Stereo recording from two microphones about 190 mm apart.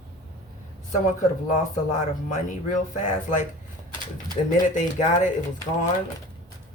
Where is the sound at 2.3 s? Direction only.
40° left (ahead or behind).